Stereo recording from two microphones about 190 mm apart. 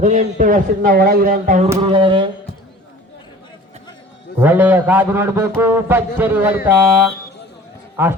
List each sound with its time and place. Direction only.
0.0 s a man's voice: 40° right (ahead or behind)
1.8 s a sound: 25° right (ahead or behind)
4.4 s a man's voice: 10° right (ahead or behind)